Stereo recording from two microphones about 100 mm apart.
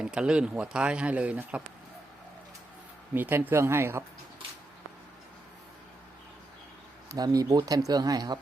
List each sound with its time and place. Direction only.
0.0 s speech: 10° right (ahead or behind)
3.2 s speech: 20° right (ahead or behind)
7.2 s speech: 40° right (ahead or behind)